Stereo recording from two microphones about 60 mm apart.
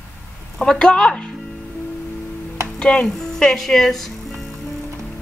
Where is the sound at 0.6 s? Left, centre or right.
Centre.